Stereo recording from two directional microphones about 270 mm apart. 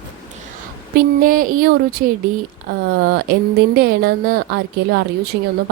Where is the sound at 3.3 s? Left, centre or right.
Right.